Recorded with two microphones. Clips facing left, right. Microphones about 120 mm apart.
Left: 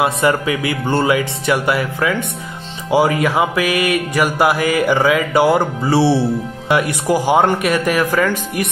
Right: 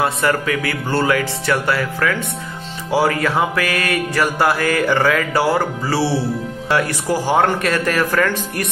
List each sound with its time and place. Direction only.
0.0 s speech: 20° left (ahead or behind)
2.9 s music: 15° left (ahead or behind)